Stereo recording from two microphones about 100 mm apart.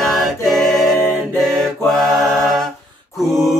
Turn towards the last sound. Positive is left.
turn(degrees=0)  # may be behind; listen again after turning